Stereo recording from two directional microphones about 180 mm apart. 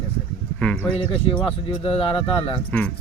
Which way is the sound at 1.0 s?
30° left (ahead or behind).